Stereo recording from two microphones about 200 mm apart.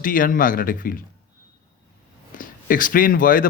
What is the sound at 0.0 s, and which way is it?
A man's voice, 45° left (ahead or behind).